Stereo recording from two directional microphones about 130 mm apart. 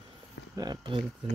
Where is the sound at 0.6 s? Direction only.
35° right (ahead or behind).